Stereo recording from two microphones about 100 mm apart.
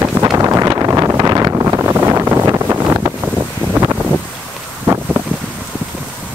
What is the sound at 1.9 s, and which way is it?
Vehicle, 25° right (ahead or behind).